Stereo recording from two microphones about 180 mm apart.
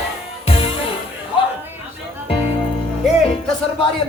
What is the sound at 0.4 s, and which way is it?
Music, 30° left (ahead or behind).